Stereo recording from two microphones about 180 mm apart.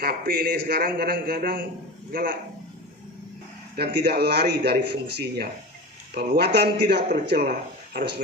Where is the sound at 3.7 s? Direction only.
65° right (ahead or behind).